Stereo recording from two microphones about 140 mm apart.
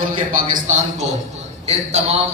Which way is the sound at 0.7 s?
55° right (ahead or behind).